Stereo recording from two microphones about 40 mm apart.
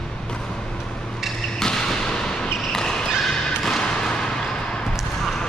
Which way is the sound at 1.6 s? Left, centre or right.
Centre.